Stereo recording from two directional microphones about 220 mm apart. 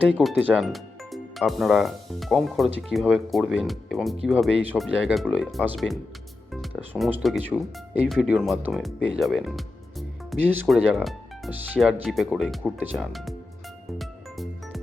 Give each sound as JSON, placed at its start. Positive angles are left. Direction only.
{"t": 0.1, "sound": "speech", "side_deg": -5}
{"t": 14.0, "sound": "music", "side_deg": 0}